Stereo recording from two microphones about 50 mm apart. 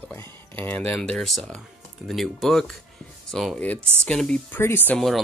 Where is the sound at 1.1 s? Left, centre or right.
Centre.